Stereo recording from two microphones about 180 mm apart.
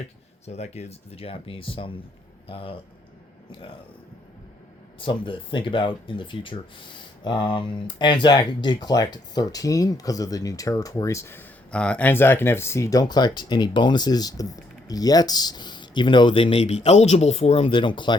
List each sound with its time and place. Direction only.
0.4 s speech: 35° left (ahead or behind)
4.9 s speech: 30° left (ahead or behind)